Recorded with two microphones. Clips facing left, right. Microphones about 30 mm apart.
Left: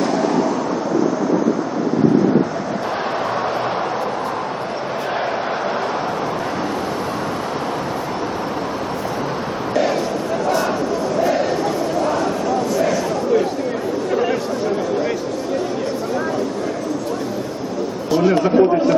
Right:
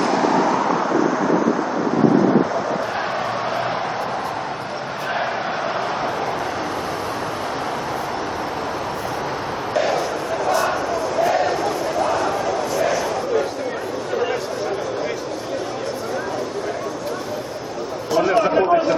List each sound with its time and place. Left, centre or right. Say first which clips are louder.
0.1 s vehicle: even; centre
9.7 s a sound: left 2 dB; centre
18.5 s chatter: left 4 dB; right